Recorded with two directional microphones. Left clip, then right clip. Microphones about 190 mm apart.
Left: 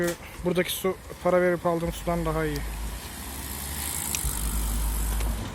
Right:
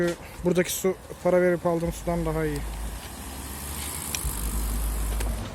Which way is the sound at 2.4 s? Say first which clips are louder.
Even; 15° right (ahead or behind).